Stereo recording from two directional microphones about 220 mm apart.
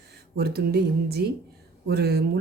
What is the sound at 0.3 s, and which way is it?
Speech, 45° right (ahead or behind).